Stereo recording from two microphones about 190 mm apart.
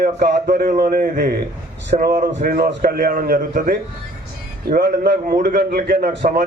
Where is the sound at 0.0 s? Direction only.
45° right (ahead or behind).